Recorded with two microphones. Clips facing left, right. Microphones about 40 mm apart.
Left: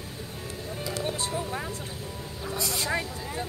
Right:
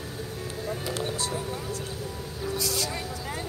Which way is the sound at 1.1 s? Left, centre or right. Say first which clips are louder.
Even; left.